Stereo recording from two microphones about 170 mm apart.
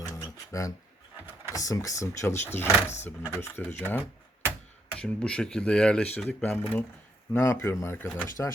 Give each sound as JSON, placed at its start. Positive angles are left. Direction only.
{"t": 0.0, "sound": "music", "side_deg": 20}
{"t": 1.5, "sound": "speech", "side_deg": 20}